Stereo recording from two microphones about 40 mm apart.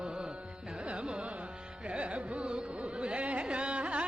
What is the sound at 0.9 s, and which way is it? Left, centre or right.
Carnatic music, right.